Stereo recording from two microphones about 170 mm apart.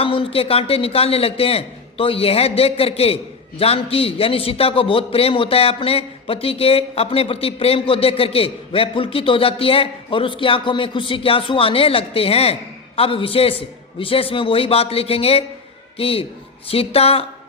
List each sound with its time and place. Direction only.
0.0 s a man's voice: 30° left (ahead or behind)